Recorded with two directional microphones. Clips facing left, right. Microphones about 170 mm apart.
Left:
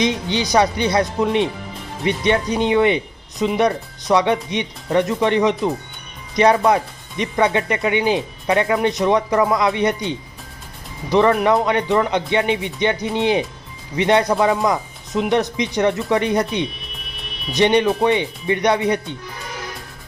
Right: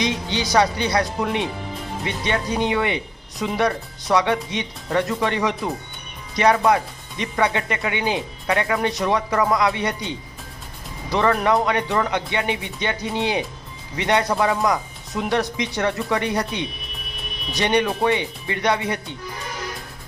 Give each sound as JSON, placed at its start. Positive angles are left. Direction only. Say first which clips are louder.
{"t": 0.0, "sound": "speech", "louder": "left 4 dB", "side_deg": 20}